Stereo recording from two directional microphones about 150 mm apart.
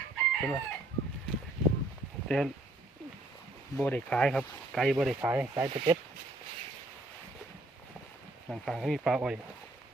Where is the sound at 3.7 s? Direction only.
10° left (ahead or behind); by 5.4 s 10° right (ahead or behind).